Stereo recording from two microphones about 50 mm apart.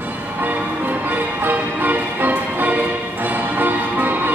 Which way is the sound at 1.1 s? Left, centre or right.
Right.